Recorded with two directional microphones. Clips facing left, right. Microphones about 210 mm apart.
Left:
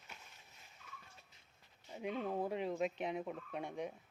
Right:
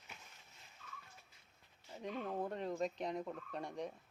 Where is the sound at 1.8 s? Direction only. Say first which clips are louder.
Left 3 dB; 10° left (ahead or behind).